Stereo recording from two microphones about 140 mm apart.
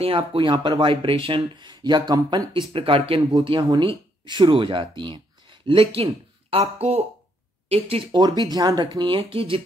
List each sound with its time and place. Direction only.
0.0 s speech: 40° right (ahead or behind)
2.7 s speech: 40° right (ahead or behind)